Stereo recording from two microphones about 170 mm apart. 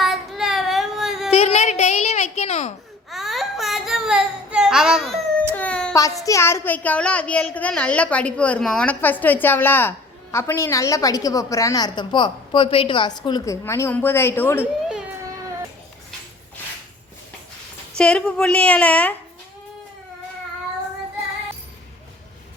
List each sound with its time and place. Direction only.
0.0 s child singing: centre (ahead or behind)
1.3 s a sound: 35° left (ahead or behind)
3.1 s a sound: centre (ahead or behind)
5.5 s child singing: 5° left (ahead or behind)
6.2 s a child's voice: 15° left (ahead or behind)
14.6 s baby cry: 5° right (ahead or behind)
17.9 s a child's voice: 5° left (ahead or behind)